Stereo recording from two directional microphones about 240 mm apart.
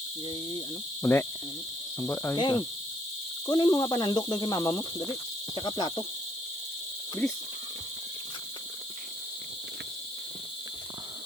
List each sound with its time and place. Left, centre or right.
1.0 s speech: centre